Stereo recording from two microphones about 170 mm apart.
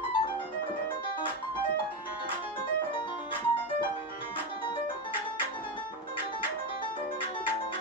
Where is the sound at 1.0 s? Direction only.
30° left (ahead or behind).